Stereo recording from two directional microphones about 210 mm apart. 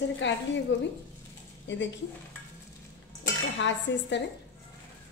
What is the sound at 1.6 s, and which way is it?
Speech, 60° left (ahead or behind).